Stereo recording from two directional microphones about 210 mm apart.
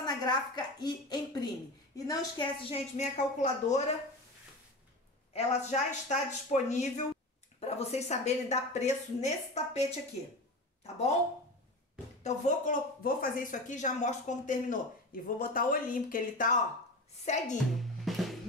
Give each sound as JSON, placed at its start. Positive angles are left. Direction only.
{"t": 0.0, "sound": "a woman's voice", "side_deg": 20}
{"t": 5.3, "sound": "speech", "side_deg": 30}
{"t": 12.2, "sound": "speech", "side_deg": 35}
{"t": 18.1, "sound": "music", "side_deg": 0}